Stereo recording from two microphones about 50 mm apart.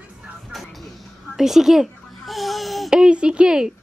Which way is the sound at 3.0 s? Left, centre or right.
Centre.